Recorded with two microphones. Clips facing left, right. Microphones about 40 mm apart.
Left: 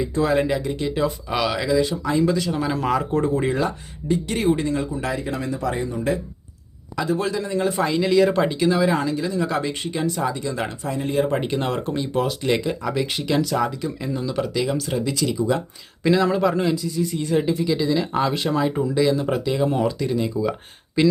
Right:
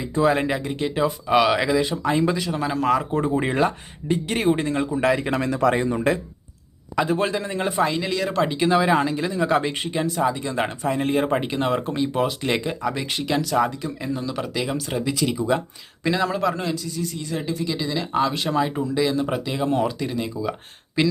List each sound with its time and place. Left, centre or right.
0.0 s speech: centre
1.5 s speech: right
2.4 s speech: centre
4.1 s speech: right
5.1 s speech: right
7.0 s speech: right
7.7 s speech: centre
8.5 s speech: right
9.9 s speech: centre
10.8 s speech: right
11.3 s speech: centre; by 15.6 s right
16.0 s speech: centre
17.0 s speech: centre